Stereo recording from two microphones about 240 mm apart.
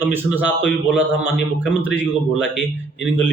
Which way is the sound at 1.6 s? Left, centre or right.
Centre.